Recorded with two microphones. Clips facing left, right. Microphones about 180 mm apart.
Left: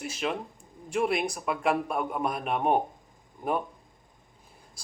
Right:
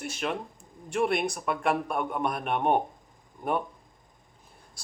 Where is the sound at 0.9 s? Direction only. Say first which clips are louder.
Right 1 dB; 5° left (ahead or behind).